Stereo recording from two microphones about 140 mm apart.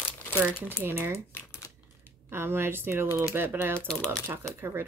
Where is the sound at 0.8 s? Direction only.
20° right (ahead or behind).